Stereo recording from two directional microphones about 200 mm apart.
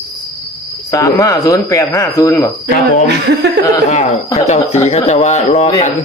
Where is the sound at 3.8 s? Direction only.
35° left (ahead or behind).